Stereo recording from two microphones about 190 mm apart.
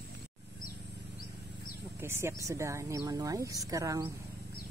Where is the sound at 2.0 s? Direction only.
15° right (ahead or behind).